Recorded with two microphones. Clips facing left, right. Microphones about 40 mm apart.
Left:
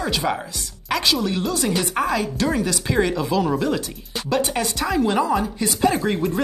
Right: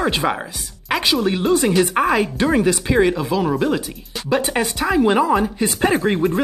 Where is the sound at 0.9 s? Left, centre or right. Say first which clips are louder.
Right 3 dB; centre.